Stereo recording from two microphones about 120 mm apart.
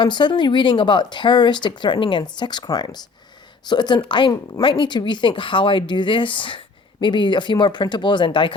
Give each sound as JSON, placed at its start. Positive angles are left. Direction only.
{"t": 0.0, "sound": "speech", "side_deg": 40}